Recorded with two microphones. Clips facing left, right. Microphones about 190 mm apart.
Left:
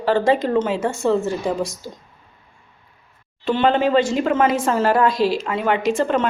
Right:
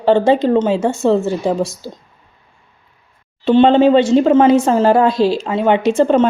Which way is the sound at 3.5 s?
25° right (ahead or behind).